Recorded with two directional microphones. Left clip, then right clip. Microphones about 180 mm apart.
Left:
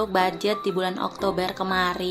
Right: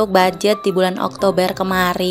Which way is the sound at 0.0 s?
40° right (ahead or behind).